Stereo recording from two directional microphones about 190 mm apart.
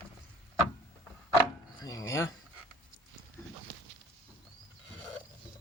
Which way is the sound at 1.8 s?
15° left (ahead or behind).